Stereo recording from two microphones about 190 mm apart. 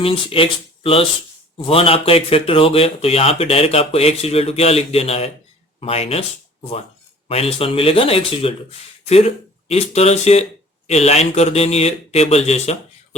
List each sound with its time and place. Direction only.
0.0 s speech: 30° left (ahead or behind)
7.3 s speech: 30° left (ahead or behind)